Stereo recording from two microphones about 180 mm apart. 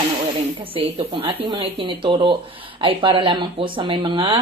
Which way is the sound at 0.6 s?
30° right (ahead or behind).